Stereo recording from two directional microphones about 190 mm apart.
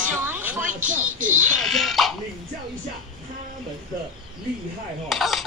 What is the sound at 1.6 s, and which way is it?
Speech, centre (ahead or behind).